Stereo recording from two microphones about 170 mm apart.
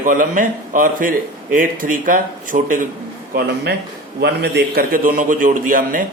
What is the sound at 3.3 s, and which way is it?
A man's voice, 75° right (ahead or behind).